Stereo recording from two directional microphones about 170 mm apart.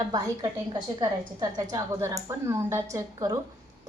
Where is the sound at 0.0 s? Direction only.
25° right (ahead or behind).